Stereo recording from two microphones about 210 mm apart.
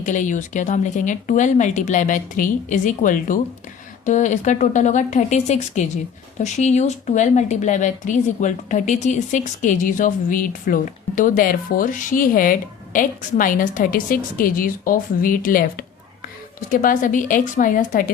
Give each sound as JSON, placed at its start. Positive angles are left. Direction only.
{"t": 0.0, "sound": "speech", "side_deg": 35}
{"t": 16.7, "sound": "speech", "side_deg": 40}